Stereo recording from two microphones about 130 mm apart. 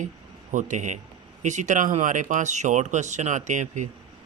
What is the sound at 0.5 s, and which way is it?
Speech, 70° right (ahead or behind).